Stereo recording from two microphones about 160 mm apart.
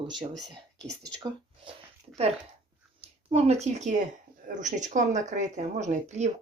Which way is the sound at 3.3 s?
40° right (ahead or behind).